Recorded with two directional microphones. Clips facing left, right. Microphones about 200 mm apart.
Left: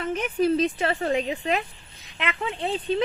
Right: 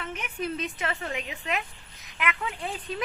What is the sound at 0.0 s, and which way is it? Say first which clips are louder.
Speech: left 10 dB; 35° left (ahead or behind).